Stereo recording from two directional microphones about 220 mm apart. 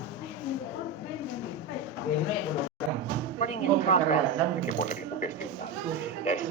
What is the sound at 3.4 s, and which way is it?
Speech, 30° left (ahead or behind).